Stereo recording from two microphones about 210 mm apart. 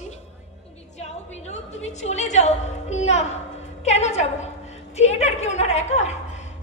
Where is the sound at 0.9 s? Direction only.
30° left (ahead or behind).